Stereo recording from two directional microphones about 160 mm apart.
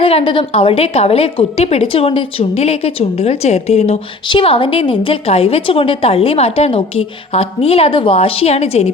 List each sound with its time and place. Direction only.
0.0 s a woman's voice: 35° left (ahead or behind)